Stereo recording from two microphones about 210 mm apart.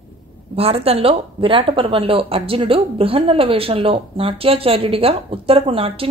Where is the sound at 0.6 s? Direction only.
30° right (ahead or behind).